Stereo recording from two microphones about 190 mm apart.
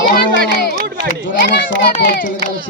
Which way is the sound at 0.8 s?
60° right (ahead or behind).